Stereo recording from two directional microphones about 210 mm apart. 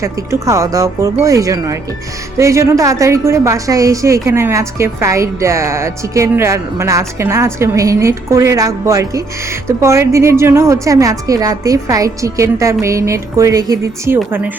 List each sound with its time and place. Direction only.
0.0 s a woman's voice: 15° right (ahead or behind)